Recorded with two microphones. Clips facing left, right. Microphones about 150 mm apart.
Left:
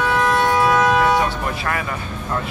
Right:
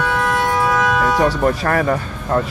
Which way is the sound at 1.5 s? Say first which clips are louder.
Right 8 dB; 45° right (ahead or behind).